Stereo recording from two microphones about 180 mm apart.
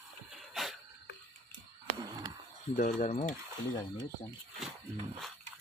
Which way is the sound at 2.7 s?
45° left (ahead or behind).